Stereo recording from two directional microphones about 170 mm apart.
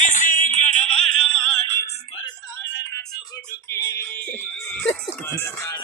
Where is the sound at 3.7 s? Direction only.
20° left (ahead or behind).